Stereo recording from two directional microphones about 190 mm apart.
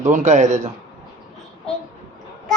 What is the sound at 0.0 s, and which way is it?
Speech, 40° right (ahead or behind).